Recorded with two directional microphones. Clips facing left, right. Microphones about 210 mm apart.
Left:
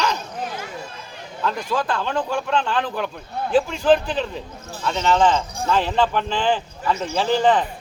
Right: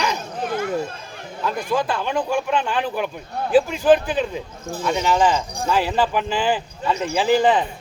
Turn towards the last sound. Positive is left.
turn(degrees=-10)  # may be behind; listen again after turning